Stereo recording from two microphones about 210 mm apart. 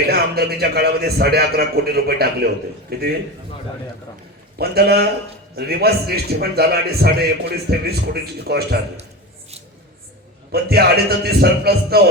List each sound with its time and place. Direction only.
0.1 s a man's voice: 50° right (ahead or behind)
4.5 s a man's voice: 50° right (ahead or behind)
10.5 s a man's voice: 50° right (ahead or behind)